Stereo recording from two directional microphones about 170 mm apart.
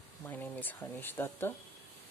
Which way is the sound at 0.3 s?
10° left (ahead or behind).